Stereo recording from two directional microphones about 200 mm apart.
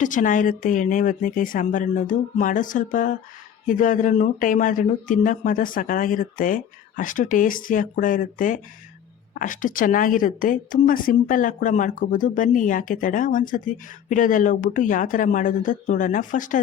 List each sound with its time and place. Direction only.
0.0 s a woman's voice: 40° left (ahead or behind)